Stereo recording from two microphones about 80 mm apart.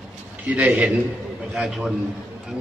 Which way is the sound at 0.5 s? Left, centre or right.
Centre.